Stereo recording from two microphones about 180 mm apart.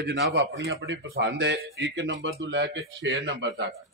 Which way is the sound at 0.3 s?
75° right (ahead or behind).